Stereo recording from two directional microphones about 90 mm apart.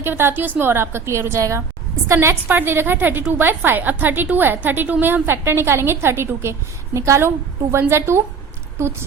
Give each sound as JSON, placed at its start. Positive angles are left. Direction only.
{"t": 0.0, "sound": "a woman's voice", "side_deg": -25}